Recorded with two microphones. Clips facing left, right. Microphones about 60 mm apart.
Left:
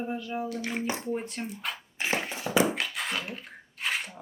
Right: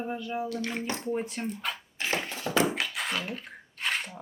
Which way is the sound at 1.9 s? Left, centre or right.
Centre.